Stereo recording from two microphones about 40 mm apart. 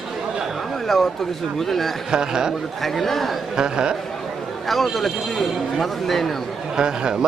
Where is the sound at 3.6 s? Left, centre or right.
Right.